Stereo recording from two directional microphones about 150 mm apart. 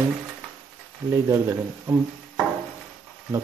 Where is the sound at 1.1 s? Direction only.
15° right (ahead or behind).